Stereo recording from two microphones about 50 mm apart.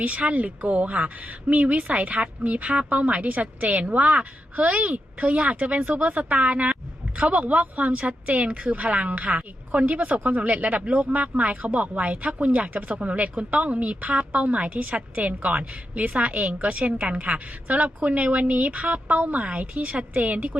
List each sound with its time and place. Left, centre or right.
0.0 s speech: right